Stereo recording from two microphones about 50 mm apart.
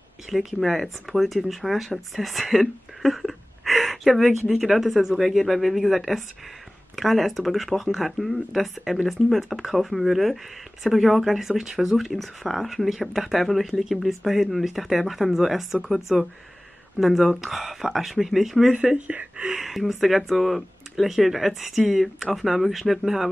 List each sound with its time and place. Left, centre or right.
0.3 s speech: centre
19.0 s speech: right
19.5 s speech: centre